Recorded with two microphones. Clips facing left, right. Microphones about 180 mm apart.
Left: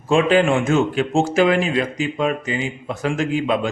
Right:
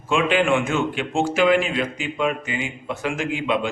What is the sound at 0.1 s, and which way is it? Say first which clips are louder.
A man's voice: left 4 dB; 40° left (ahead or behind).